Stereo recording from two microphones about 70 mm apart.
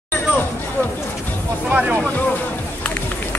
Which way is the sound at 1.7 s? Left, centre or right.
Centre.